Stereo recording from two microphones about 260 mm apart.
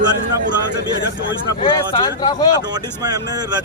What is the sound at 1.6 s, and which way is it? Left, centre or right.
Speech, centre.